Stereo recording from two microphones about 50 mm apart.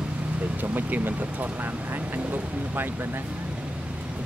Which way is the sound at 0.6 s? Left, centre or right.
Right.